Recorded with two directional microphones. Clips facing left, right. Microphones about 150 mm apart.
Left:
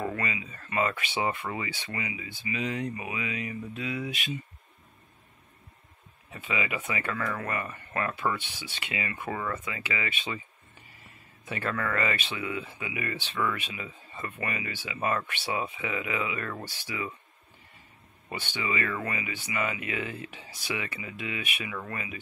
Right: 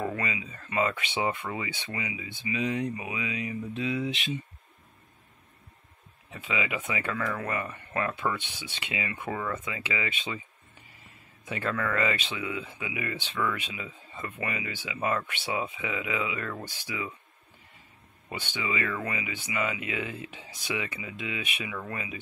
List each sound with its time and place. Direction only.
0.1 s speech: 20° right (ahead or behind)
6.4 s speech: 15° right (ahead or behind)
7.1 s speech: 5° right (ahead or behind)
7.4 s speech: 20° right (ahead or behind)
11.4 s speech: 15° right (ahead or behind)
18.3 s speech: 15° right (ahead or behind)